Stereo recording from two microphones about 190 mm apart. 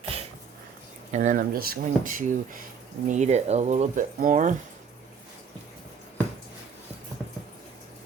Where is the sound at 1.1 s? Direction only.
40° right (ahead or behind).